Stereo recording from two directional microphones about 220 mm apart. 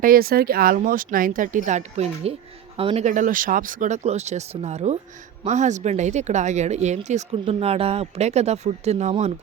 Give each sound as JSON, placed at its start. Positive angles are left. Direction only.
{"t": 0.0, "sound": "speech", "side_deg": -40}